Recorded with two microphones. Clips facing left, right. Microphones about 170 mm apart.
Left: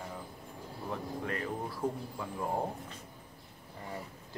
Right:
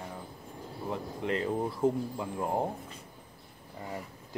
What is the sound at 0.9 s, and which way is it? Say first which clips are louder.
Speech: right 4 dB; 20° right (ahead or behind).